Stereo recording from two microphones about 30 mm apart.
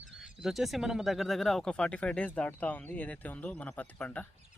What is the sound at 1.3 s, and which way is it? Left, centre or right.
Speech, centre.